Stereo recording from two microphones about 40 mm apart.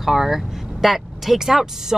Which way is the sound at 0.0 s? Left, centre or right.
Centre.